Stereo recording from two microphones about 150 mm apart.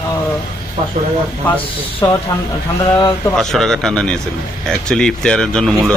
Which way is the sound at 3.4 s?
5° left (ahead or behind).